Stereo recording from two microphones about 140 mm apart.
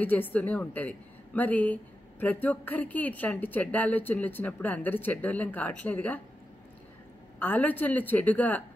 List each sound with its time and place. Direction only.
0.0 s a woman's voice: 15° left (ahead or behind)
7.3 s a woman's voice: 15° left (ahead or behind)